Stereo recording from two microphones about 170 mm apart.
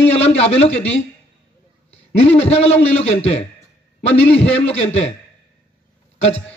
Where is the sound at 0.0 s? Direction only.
40° left (ahead or behind).